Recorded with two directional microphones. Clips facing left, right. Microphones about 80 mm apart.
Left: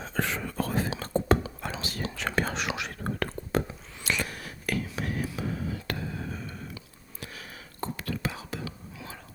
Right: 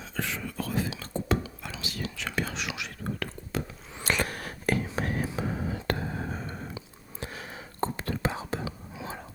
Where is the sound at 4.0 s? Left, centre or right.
Right.